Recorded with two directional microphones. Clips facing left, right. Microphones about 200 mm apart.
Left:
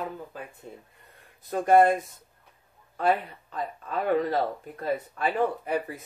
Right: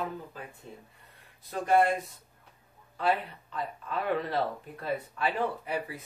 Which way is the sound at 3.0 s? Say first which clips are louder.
Left 4 dB; 45° left (ahead or behind).